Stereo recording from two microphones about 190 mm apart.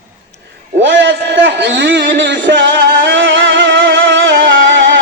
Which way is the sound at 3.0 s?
75° right (ahead or behind).